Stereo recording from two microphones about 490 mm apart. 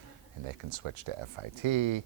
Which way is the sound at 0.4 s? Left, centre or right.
Right.